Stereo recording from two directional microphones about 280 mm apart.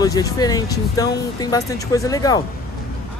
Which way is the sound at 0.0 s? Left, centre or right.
Centre.